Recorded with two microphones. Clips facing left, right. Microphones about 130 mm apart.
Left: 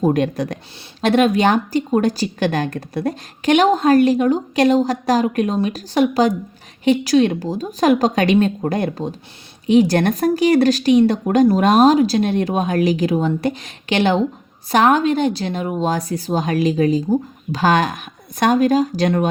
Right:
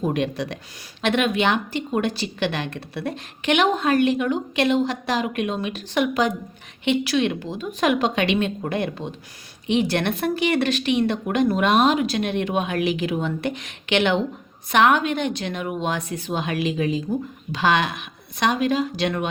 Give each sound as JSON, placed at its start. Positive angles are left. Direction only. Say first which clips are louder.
{"t": 0.0, "sound": "a woman's voice", "louder": "left 6 dB", "side_deg": 45}